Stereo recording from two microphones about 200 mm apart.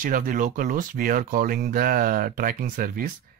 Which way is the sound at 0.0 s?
45° right (ahead or behind).